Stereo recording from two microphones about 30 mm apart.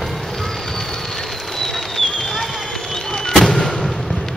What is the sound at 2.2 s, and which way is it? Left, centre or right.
Run, centre.